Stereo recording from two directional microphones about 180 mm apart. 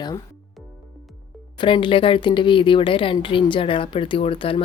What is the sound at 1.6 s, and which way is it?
Speech, 25° left (ahead or behind).